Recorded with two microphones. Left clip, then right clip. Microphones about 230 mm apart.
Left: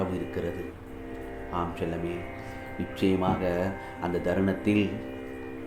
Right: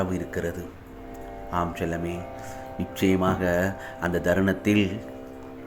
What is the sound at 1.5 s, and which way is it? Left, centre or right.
Speech, right.